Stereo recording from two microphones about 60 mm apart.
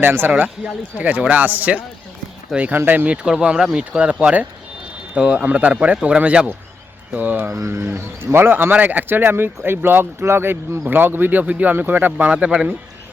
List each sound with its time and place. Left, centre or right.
0.0 s speech: right
0.9 s speech: right
3.2 s speech: centre; by 7.5 s right
7.7 s speech: right; by 12.6 s centre